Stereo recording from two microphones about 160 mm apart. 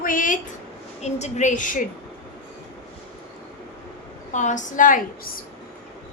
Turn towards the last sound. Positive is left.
turn(degrees=55)  # may be behind; listen again after turning